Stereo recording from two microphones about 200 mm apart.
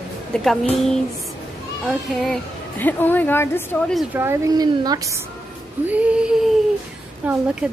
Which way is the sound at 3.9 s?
10° right (ahead or behind).